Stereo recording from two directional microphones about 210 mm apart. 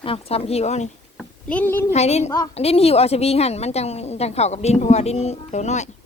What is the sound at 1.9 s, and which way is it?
A woman's voice, 30° left (ahead or behind).